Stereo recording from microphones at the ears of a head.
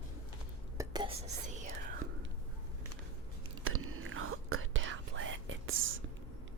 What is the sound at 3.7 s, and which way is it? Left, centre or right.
Whispering, right.